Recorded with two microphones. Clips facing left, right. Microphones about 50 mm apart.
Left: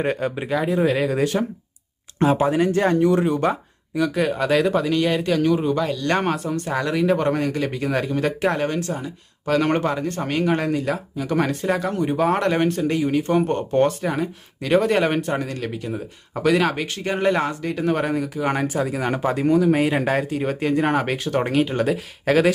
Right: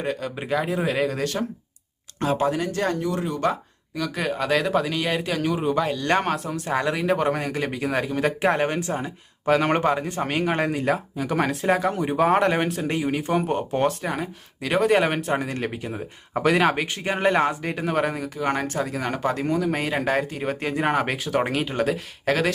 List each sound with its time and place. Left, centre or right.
0.0 s speech: left
0.3 s speech: centre
1.2 s speech: centre
2.5 s speech: left
3.4 s speech: centre
4.1 s speech: centre
8.4 s speech: right
9.5 s speech: centre
17.8 s speech: centre